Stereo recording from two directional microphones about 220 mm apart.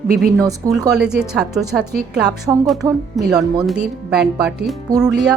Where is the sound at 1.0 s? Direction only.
5° right (ahead or behind).